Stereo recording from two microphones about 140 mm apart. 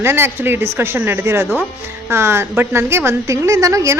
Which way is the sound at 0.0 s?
15° right (ahead or behind).